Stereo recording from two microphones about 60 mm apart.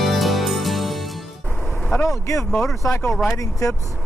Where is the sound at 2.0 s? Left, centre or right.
Left.